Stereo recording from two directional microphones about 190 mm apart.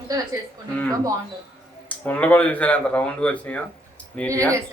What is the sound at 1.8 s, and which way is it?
Speech, 10° left (ahead or behind).